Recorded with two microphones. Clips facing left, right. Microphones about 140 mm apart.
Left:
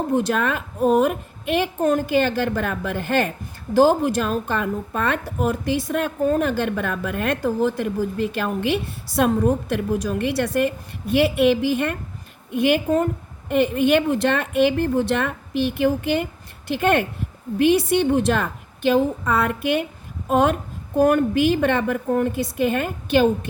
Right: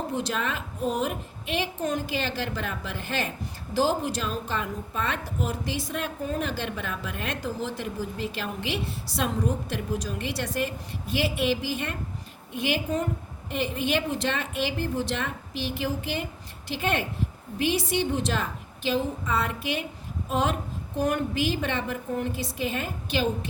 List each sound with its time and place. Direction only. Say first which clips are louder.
0.1 s a woman's voice: left 8 dB; 55° left (ahead or behind)